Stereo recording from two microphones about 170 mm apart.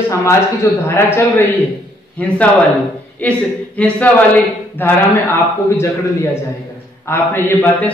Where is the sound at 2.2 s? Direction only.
10° left (ahead or behind).